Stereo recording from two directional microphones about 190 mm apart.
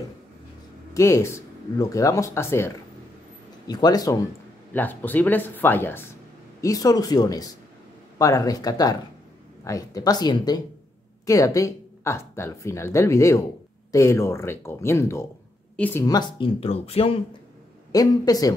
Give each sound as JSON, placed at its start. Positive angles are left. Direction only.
{"t": 0.9, "sound": "speech", "side_deg": 15}
{"t": 4.7, "sound": "speech", "side_deg": 10}
{"t": 17.9, "sound": "speech", "side_deg": 20}